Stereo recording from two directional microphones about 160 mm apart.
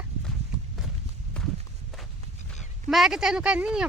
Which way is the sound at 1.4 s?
5° left (ahead or behind).